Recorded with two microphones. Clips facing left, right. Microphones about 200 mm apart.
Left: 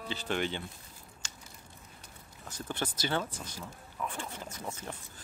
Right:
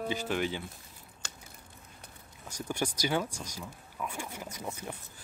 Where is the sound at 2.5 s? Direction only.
10° right (ahead or behind).